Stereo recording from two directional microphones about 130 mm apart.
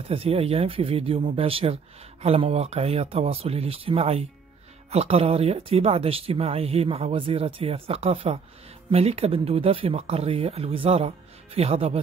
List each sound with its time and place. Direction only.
0.1 s speech: 50° right (ahead or behind)